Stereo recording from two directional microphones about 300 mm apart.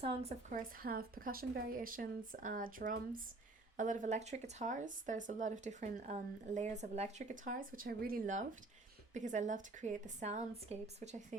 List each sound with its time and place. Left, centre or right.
0.0 s speech: centre